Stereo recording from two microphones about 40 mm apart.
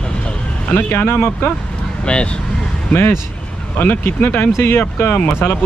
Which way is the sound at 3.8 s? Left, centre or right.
Left.